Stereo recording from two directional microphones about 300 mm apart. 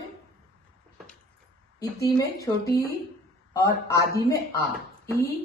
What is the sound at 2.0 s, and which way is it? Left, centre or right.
A woman's voice, centre.